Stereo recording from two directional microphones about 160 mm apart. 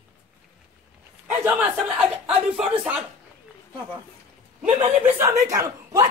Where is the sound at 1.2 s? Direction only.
10° right (ahead or behind).